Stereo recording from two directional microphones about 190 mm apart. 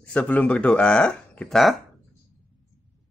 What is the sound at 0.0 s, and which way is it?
Speech, 5° left (ahead or behind).